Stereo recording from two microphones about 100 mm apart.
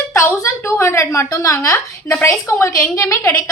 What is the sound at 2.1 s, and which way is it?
A woman's voice, 20° left (ahead or behind).